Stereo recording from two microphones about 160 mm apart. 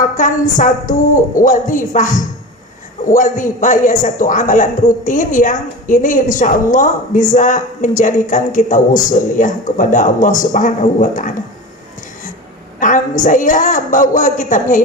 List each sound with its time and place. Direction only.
0.0 s a man's voice: 55° left (ahead or behind)
12.8 s a man's voice: 55° left (ahead or behind)